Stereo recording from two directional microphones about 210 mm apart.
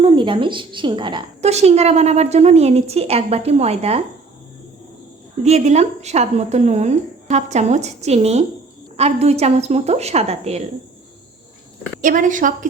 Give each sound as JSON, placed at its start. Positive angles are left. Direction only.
{"t": 0.0, "sound": "a woman's voice", "side_deg": -25}
{"t": 5.4, "sound": "a woman's voice", "side_deg": -30}
{"t": 12.0, "sound": "a woman's voice", "side_deg": -40}